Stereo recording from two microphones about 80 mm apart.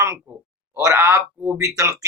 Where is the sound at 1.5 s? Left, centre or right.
Right.